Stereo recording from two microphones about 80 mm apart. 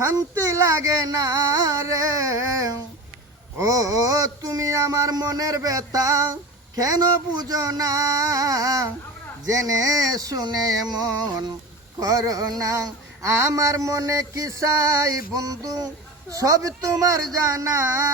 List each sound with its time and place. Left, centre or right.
0.0 s speech: right
11.9 s speech: right